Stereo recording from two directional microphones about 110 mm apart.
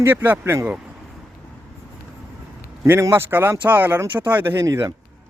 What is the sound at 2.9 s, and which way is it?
A man's voice, 20° right (ahead or behind).